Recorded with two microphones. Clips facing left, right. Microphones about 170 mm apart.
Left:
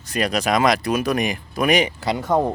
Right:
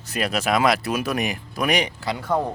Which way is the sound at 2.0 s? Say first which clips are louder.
Left 4 dB; 20° left (ahead or behind).